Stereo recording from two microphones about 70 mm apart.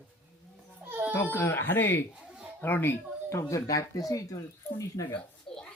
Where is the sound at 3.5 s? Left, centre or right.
Left.